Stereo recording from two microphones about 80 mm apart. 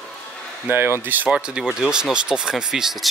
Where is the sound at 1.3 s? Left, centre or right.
Centre.